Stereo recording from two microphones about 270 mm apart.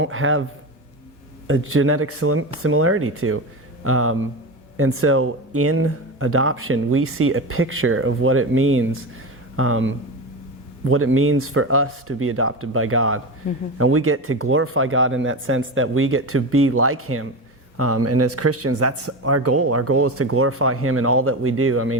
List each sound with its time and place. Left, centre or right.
0.0 s speech: right
1.5 s speech: right